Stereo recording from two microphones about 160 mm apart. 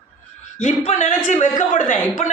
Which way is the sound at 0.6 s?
45° left (ahead or behind).